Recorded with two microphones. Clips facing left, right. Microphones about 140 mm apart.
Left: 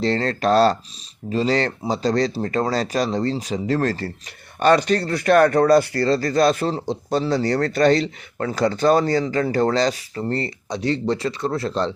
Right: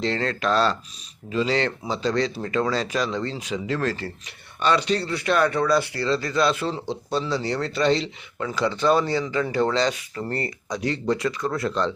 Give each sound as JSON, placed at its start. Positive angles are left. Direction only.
{"t": 0.0, "sound": "speech", "side_deg": 35}
{"t": 10.2, "sound": "speech", "side_deg": 30}